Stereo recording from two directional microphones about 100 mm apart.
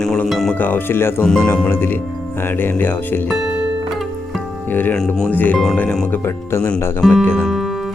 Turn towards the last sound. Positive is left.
turn(degrees=-5)  # may be behind; listen again after turning